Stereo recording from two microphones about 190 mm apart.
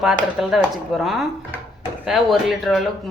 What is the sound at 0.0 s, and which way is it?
Speech, 5° right (ahead or behind).